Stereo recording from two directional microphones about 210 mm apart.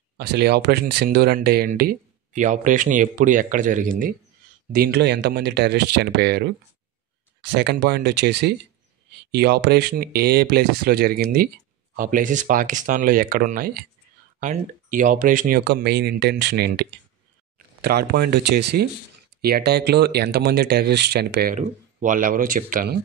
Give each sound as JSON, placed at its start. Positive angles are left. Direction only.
{"t": 0.2, "sound": "speech", "side_deg": -50}
{"t": 17.8, "sound": "speech", "side_deg": -50}
{"t": 21.5, "sound": "speech", "side_deg": -40}